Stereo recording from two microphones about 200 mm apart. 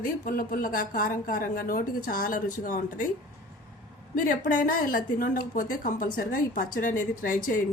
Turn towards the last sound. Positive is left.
turn(degrees=45)  # may be behind; listen again after turning